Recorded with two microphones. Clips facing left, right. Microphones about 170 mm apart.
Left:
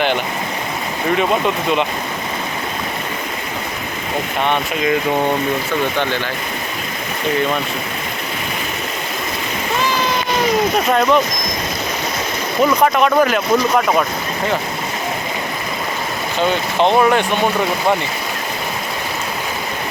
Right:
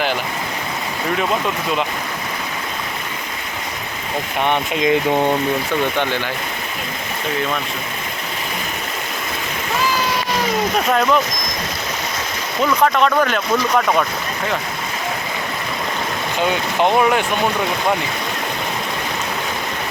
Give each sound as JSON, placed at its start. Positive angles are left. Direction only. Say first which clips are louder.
{"t": 4.4, "sound": "speech", "louder": "right 2 dB", "side_deg": -15}
{"t": 10.8, "sound": "speech", "louder": "left 1 dB", "side_deg": 0}
{"t": 12.8, "sound": "speech", "louder": "even", "side_deg": 10}
{"t": 17.0, "sound": "speech", "louder": "left 2 dB", "side_deg": -5}